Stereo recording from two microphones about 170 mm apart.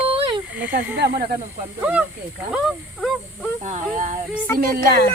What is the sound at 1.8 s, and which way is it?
Speech, 10° right (ahead or behind).